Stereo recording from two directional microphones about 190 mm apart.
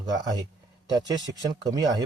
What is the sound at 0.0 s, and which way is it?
Speech, 20° right (ahead or behind).